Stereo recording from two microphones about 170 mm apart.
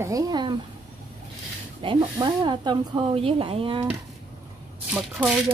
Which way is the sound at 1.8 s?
30° right (ahead or behind).